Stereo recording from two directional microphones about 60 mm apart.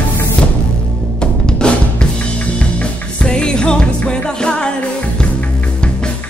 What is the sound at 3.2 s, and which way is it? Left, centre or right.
Music, centre.